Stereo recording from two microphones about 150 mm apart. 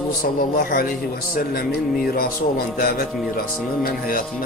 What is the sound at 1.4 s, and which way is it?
Speech, 85° left.